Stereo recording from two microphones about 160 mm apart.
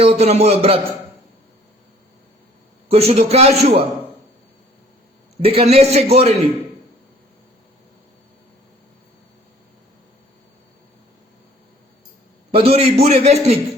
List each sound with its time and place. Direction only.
0.0 s a man's voice: 40° right (ahead or behind)
2.9 s a man's voice: 40° right (ahead or behind)
5.4 s a man's voice: 40° right (ahead or behind)
12.5 s a man's voice: 40° right (ahead or behind)